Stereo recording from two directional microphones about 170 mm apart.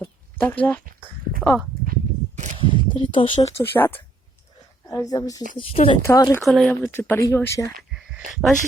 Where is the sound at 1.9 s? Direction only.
45° right (ahead or behind).